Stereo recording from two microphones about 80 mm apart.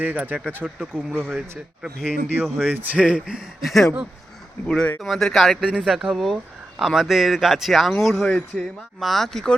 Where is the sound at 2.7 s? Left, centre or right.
Right; by 3.9 s centre.